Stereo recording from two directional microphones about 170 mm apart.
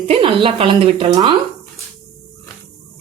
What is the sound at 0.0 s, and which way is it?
Speech, 30° right (ahead or behind).